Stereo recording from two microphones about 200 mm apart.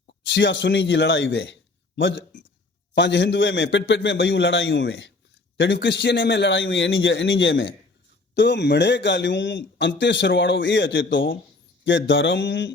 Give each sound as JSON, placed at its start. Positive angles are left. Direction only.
{"t": 0.1, "sound": "a man's voice", "side_deg": 60}